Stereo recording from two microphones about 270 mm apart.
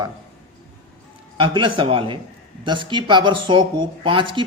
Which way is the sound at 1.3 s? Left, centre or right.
Centre.